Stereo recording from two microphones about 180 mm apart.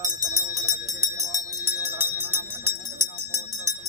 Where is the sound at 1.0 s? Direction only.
15° right (ahead or behind).